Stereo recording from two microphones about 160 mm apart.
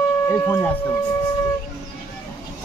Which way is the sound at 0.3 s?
15° left (ahead or behind).